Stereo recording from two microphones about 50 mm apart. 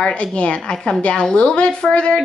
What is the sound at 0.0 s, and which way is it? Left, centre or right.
A woman's voice, left.